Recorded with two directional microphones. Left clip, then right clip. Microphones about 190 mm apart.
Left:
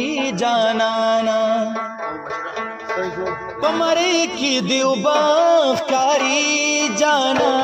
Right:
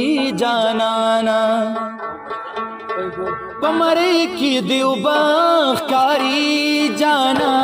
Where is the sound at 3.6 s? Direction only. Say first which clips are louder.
Right 2 dB; 40° right (ahead or behind).